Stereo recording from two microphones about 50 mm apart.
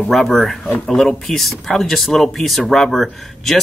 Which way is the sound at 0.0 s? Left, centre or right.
Centre.